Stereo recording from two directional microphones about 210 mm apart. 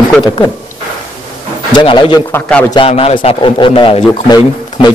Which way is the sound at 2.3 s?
5° left (ahead or behind).